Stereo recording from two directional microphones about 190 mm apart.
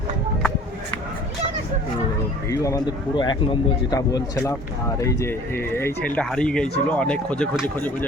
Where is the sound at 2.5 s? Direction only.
20° left (ahead or behind).